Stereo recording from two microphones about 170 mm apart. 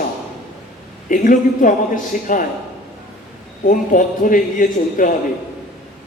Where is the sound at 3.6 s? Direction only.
50° left (ahead or behind).